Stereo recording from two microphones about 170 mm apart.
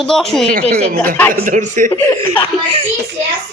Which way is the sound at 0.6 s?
65° right (ahead or behind).